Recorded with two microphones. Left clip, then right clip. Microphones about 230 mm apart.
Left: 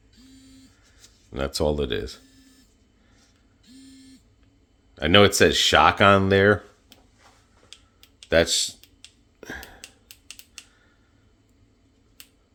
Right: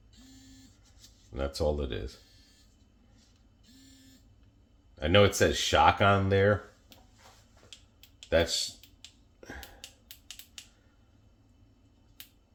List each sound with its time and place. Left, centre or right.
1.3 s speech: left
4.9 s speech: left
8.3 s speech: left
9.4 s hiccup: left
10.1 s a sound: centre